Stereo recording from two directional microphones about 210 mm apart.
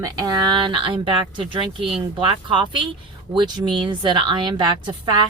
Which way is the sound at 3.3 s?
20° right (ahead or behind).